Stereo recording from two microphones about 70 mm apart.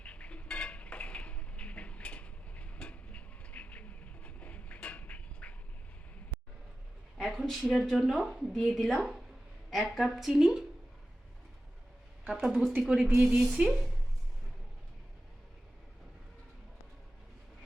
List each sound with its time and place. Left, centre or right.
0.0 s a sound: centre
7.2 s speech: centre
12.5 s a woman's voice: centre